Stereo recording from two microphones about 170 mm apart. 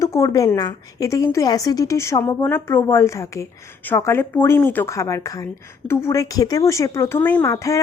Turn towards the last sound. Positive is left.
turn(degrees=20)  # may be behind; listen again after turning